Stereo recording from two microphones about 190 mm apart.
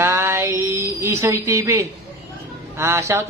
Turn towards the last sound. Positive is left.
turn(degrees=-15)  # may be behind; listen again after turning